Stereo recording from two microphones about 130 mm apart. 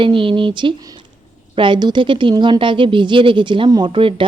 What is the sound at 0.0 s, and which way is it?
A woman's voice, 40° right (ahead or behind).